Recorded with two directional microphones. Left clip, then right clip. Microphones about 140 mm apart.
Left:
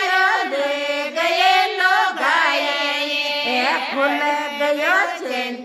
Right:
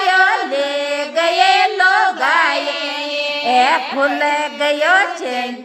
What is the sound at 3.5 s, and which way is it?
Music, 15° right (ahead or behind).